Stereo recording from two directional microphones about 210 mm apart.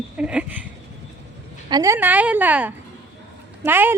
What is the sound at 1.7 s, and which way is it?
A woman's voice, 15° right (ahead or behind).